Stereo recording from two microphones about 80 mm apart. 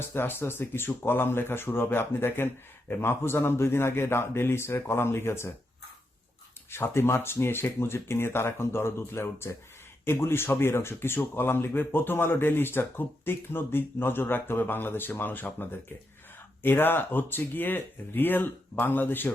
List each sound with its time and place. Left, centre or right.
0.1 s speech: left
6.7 s speech: left
16.6 s speech: left